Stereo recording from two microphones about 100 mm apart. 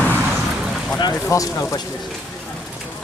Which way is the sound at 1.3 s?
30° left (ahead or behind).